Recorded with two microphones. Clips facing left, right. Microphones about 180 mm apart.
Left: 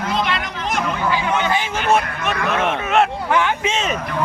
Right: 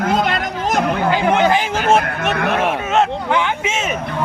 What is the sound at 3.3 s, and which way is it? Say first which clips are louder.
Speech: even; 15° right (ahead or behind).